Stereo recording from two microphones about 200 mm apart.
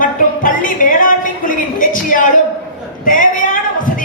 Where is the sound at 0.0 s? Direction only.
45° left (ahead or behind).